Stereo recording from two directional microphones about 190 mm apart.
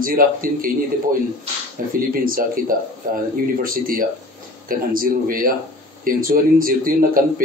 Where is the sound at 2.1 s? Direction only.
50° right (ahead or behind).